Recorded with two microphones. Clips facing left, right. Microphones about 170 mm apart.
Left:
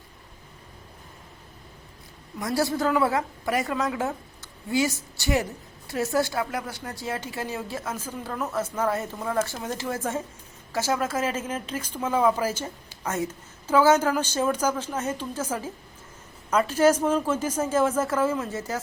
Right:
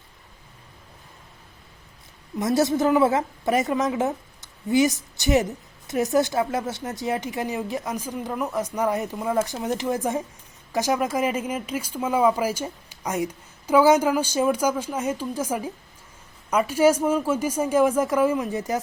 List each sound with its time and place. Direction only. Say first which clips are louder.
2.4 s a woman's voice: right 4 dB; 20° right (ahead or behind)